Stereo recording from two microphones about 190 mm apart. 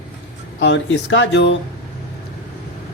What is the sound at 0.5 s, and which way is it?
Speech, 65° left (ahead or behind).